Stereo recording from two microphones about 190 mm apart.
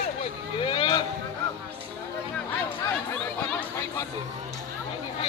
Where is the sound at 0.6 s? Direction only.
25° left (ahead or behind).